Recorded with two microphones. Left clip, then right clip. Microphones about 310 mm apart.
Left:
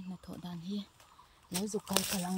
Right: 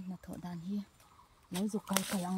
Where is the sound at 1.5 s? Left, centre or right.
Centre.